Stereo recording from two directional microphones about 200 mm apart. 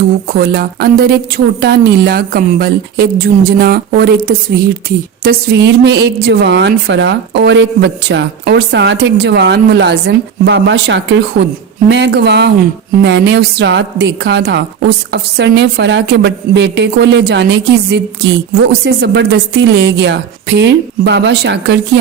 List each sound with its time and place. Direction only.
0.3 s speech: 50° right (ahead or behind)